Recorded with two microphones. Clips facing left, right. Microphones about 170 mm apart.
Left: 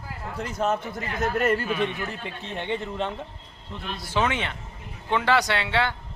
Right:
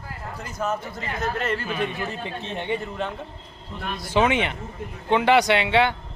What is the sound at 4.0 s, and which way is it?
Speech, 15° right (ahead or behind).